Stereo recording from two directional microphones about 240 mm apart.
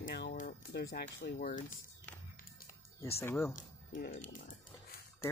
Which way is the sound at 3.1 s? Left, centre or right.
Centre.